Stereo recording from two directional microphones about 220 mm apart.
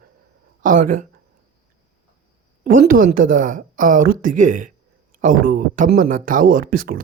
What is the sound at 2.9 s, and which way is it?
A woman's voice, 40° right (ahead or behind).